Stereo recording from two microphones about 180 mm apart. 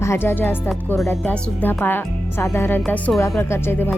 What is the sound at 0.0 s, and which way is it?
Speech, 15° left (ahead or behind).